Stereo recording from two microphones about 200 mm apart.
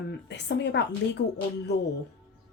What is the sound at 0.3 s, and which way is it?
Speech, 60° left (ahead or behind).